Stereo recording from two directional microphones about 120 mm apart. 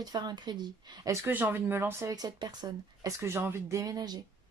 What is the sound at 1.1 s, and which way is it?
Speech, 20° right (ahead or behind).